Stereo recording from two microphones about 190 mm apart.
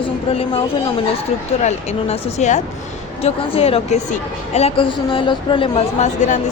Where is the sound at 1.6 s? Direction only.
35° left (ahead or behind).